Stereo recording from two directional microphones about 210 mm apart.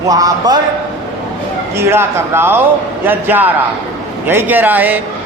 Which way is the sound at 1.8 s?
10° right (ahead or behind).